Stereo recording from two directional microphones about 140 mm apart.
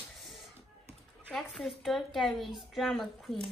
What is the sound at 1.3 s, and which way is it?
A woman's voice, 5° left (ahead or behind).